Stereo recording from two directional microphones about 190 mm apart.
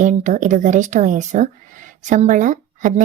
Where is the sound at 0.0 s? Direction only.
40° right (ahead or behind).